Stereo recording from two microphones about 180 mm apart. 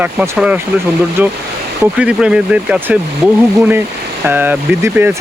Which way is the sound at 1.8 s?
5° right (ahead or behind).